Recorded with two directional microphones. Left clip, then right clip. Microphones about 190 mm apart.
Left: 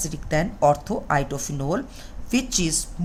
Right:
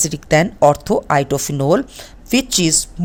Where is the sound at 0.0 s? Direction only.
55° right (ahead or behind).